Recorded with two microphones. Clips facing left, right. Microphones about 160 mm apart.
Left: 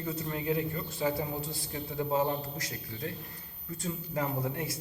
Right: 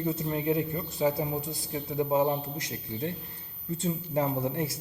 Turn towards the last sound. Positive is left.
turn(degrees=-25)  # may be behind; listen again after turning